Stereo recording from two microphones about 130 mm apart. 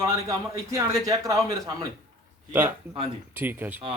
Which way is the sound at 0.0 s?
25° right (ahead or behind).